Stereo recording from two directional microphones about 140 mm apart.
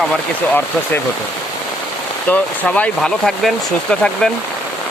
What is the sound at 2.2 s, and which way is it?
Speech, 10° left (ahead or behind).